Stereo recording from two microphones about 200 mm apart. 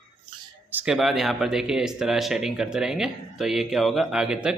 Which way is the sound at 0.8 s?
Centre (ahead or behind).